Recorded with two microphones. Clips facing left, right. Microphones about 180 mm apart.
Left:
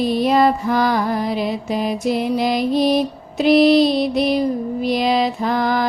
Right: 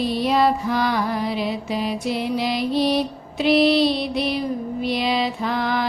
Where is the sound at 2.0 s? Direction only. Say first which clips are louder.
Left 4 dB; 45° left (ahead or behind).